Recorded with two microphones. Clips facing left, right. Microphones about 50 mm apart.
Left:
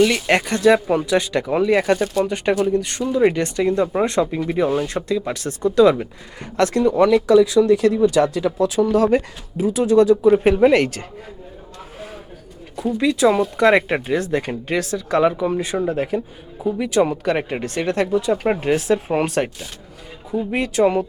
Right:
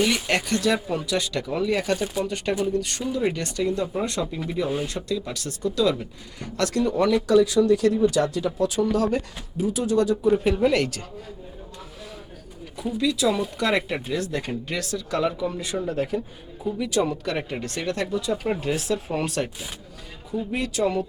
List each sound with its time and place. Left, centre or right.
0.1 s speech: left
8.4 s speech: left
8.6 s speech: left
12.7 s speech: centre
13.0 s speech: left
20.5 s speech: left